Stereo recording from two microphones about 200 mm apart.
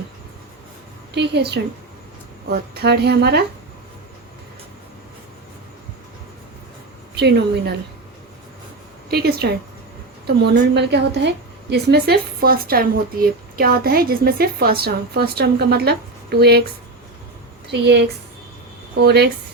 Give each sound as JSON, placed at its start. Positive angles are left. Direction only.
{"t": 1.1, "sound": "a woman's voice", "side_deg": -60}
{"t": 7.2, "sound": "a woman's voice", "side_deg": -60}
{"t": 9.0, "sound": "a woman's voice", "side_deg": -50}
{"t": 17.7, "sound": "a woman's voice", "side_deg": -60}
{"t": 19.0, "sound": "a woman's voice", "side_deg": -55}